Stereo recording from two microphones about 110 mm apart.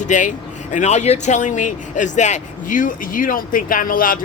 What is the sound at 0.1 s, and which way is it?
Speech, 90° left.